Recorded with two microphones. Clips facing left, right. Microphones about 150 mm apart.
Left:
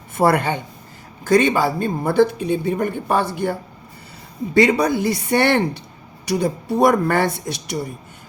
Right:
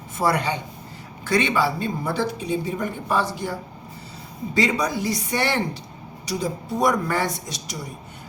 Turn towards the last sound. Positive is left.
turn(degrees=60)  # may be behind; listen again after turning